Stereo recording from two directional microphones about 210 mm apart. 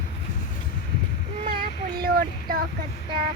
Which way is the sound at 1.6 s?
45° right (ahead or behind).